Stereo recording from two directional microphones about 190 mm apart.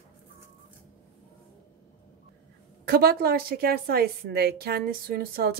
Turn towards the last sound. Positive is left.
turn(degrees=-50)  # may be behind; listen again after turning